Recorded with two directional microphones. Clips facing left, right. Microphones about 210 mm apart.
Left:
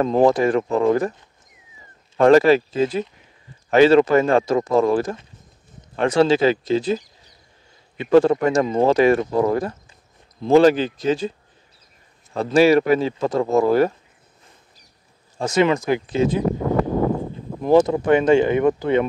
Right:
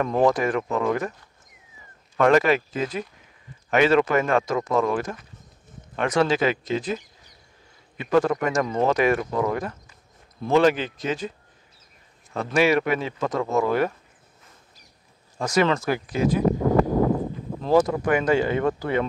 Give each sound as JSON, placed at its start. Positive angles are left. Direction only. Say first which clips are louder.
{"t": 0.0, "sound": "speech", "louder": "left 4 dB", "side_deg": 25}
{"t": 2.1, "sound": "speech", "louder": "left 6 dB", "side_deg": 30}
{"t": 12.4, "sound": "speech", "louder": "left 6 dB", "side_deg": 35}
{"t": 15.3, "sound": "speech", "louder": "left 3 dB", "side_deg": 25}
{"t": 17.6, "sound": "speech", "louder": "left 4 dB", "side_deg": 20}